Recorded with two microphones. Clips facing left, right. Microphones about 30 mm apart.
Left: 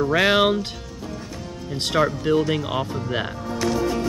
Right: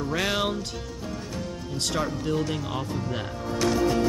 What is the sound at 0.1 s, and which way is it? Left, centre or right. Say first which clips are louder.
Speech: left 8 dB; left.